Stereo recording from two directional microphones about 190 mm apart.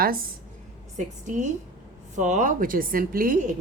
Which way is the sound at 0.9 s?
40° right (ahead or behind).